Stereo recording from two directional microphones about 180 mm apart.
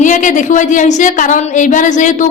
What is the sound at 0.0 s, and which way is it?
A woman's voice, 45° left (ahead or behind).